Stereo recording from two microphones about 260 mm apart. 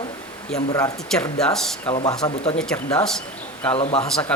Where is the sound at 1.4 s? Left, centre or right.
Centre.